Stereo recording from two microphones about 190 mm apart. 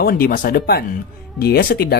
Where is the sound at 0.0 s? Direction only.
50° left (ahead or behind).